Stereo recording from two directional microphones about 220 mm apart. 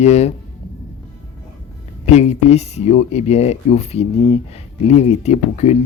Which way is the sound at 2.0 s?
30° left (ahead or behind).